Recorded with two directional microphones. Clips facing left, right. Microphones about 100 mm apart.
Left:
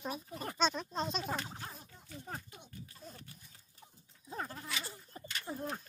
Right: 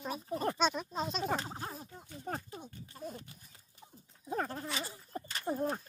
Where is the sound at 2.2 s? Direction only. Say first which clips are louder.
Right 8 dB; 40° right (ahead or behind).